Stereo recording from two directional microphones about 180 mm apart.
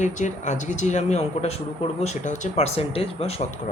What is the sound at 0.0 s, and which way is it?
Speech, 40° left (ahead or behind).